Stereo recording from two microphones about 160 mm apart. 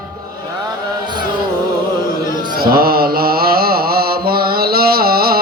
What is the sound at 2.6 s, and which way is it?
Mantra, 70° right (ahead or behind).